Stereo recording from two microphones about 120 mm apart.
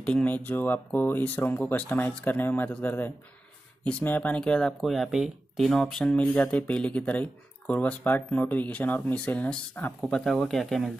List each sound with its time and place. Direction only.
0.0 s speech: 10° left (ahead or behind)